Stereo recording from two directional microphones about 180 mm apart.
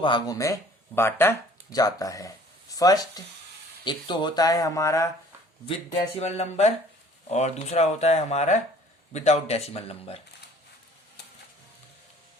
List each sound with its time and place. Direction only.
0.0 s speech: 25° left (ahead or behind)
5.6 s speech: 30° left (ahead or behind)